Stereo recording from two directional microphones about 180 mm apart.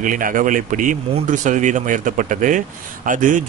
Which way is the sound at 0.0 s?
50° right (ahead or behind).